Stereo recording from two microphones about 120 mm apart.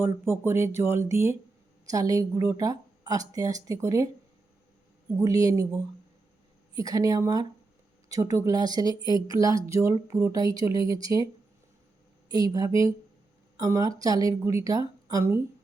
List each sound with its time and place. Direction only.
0.0 s a woman's voice: 20° right (ahead or behind)
12.3 s a woman's voice: 30° right (ahead or behind)